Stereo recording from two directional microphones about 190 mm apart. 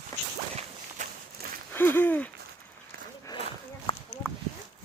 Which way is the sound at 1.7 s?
10° left (ahead or behind).